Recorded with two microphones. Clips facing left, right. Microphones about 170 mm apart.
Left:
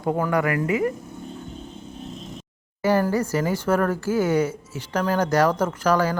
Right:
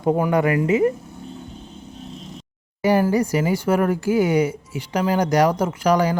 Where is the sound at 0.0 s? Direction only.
20° right (ahead or behind).